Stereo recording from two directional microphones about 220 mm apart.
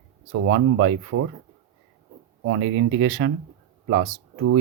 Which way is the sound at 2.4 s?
55° right (ahead or behind).